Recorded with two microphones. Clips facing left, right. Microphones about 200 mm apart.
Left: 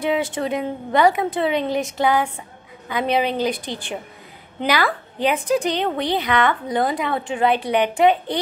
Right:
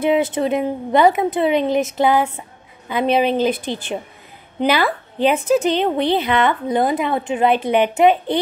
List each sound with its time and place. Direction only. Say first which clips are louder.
0.0 s a woman's voice: right 5 dB; 20° right (ahead or behind)